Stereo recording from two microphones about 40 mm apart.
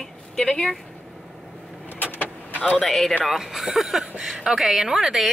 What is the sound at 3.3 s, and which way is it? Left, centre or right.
A woman's voice, centre.